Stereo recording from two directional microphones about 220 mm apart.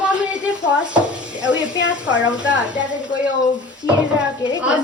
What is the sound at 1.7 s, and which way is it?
Speech, 55° left (ahead or behind).